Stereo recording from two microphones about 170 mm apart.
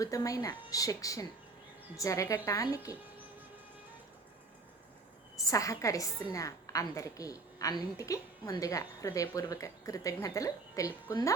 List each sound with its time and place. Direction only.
0.0 s a woman's voice: 20° left (ahead or behind)
5.4 s a woman's voice: 20° left (ahead or behind)